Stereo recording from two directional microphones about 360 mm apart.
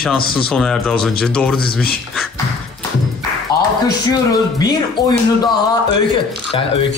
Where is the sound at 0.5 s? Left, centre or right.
Centre.